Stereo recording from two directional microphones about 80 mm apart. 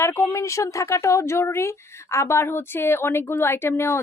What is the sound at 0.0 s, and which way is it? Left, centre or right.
A woman's voice, left.